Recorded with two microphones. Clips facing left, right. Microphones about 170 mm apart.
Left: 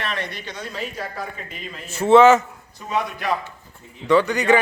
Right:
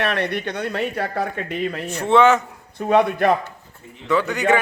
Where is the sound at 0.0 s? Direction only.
65° right (ahead or behind).